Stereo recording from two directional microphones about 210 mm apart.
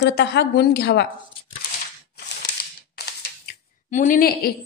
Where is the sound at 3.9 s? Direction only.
40° left (ahead or behind).